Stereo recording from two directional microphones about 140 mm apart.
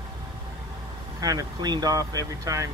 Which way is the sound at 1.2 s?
30° right (ahead or behind).